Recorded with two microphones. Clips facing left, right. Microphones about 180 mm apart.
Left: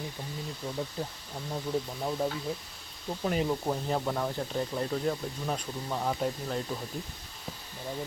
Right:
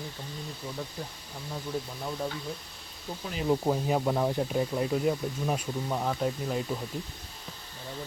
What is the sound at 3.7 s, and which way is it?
Speech, 10° right (ahead or behind).